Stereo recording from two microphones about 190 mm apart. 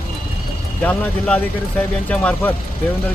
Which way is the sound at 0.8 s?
5° left (ahead or behind).